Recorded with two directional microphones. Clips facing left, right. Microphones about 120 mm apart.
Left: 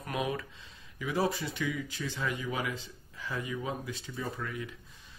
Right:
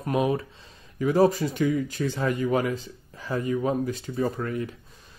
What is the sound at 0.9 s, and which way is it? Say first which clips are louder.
Speech: right 10 dB; 45° right (ahead or behind).